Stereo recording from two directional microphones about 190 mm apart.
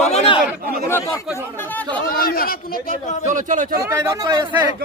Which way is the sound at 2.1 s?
50° left (ahead or behind).